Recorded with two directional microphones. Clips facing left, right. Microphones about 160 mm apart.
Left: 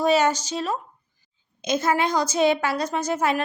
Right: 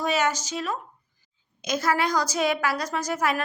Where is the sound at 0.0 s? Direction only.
30° left (ahead or behind).